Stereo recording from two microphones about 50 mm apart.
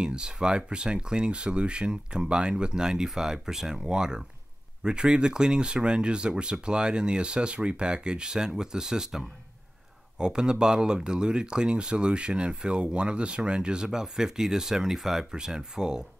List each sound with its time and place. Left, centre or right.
0.0 s speech: centre